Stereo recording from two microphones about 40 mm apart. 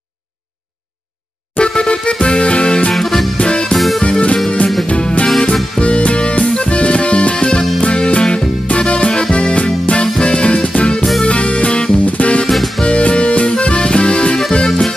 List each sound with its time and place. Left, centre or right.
1.5 s music: left
1.9 s music: left
2.9 s music: centre
3.3 s music: left
3.7 s music: centre
4.0 s music: left
10.2 s music: left
12.4 s music: centre
12.8 s music: left